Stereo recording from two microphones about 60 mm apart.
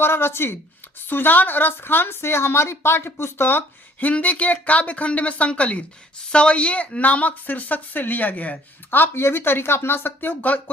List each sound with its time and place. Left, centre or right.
0.0 s speech: left
4.0 s a woman's voice: left